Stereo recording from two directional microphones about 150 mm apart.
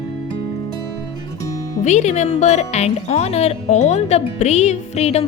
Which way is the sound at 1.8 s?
50° left (ahead or behind).